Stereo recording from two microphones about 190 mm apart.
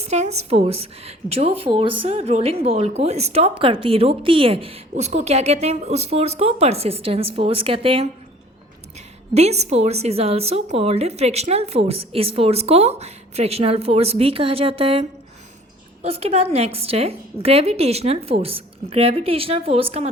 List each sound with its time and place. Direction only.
0.0 s a woman's voice: 35° right (ahead or behind)
9.3 s a woman's voice: 35° right (ahead or behind)
16.0 s a woman's voice: 30° right (ahead or behind)